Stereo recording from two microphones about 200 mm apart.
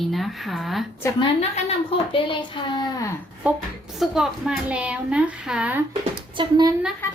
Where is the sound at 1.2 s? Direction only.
30° left (ahead or behind).